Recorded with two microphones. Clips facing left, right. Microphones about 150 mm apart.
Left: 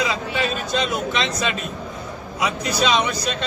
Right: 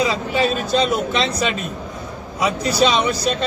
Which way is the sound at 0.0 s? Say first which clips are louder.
Right 4 dB; 35° right (ahead or behind).